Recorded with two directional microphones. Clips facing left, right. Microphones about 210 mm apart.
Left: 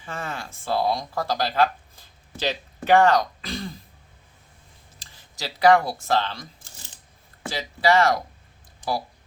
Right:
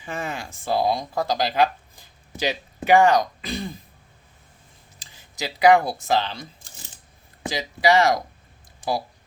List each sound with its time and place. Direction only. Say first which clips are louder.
0.0 s speech: right 3 dB; 15° right (ahead or behind)
5.4 s speech: right 1 dB; 15° right (ahead or behind)
7.4 s speech: right 1 dB; 15° right (ahead or behind)